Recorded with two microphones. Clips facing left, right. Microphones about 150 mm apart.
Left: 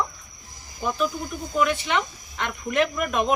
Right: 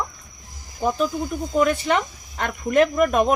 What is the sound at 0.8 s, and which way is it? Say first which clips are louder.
Speech: right 4 dB; 35° right (ahead or behind).